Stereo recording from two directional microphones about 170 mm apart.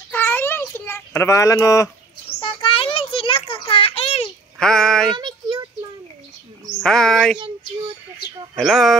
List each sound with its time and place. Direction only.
0.1 s a sound: 15° left (ahead or behind)
2.4 s a sound: 35° left (ahead or behind)
4.6 s speech: 5° left (ahead or behind)
5.1 s child singing: 25° right (ahead or behind)
6.8 s speech: 5° left (ahead or behind)
8.5 s speech: centre (ahead or behind)